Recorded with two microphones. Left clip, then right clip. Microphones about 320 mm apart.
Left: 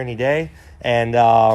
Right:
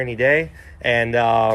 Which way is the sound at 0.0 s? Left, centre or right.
Centre.